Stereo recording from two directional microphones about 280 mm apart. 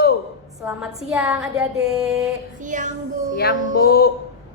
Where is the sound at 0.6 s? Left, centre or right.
Centre.